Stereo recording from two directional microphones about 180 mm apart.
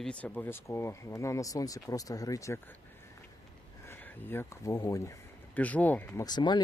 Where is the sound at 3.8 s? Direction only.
10° left (ahead or behind).